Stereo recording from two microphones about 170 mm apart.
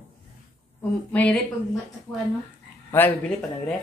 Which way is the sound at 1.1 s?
10° left (ahead or behind).